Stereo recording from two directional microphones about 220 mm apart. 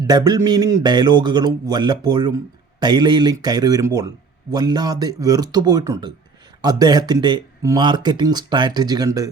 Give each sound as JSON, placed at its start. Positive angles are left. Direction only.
{"t": 0.0, "sound": "speech", "side_deg": -20}